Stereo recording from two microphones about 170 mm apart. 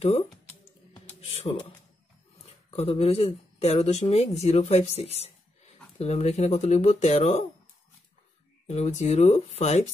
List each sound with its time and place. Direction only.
1.2 s speech: 40° left (ahead or behind)
8.6 s speech: 40° left (ahead or behind)